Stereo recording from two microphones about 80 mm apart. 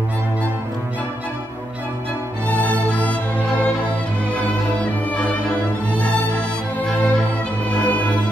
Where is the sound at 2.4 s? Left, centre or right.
Centre.